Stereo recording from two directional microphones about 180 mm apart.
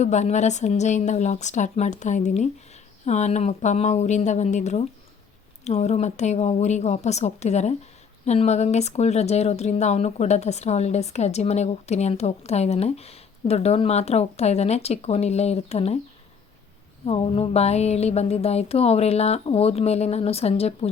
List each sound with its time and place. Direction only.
0.0 s speech: 40° left (ahead or behind)
17.1 s speech: 35° left (ahead or behind)